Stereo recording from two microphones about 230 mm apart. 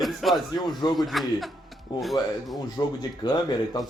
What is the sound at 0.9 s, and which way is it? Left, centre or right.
A man's voice, centre.